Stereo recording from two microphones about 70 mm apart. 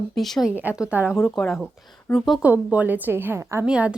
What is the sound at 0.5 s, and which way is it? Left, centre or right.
Speech, right.